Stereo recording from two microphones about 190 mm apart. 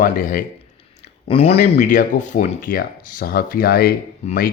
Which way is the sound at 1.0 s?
35° left (ahead or behind).